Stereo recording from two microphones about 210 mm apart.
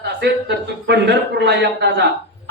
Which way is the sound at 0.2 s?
55° right (ahead or behind).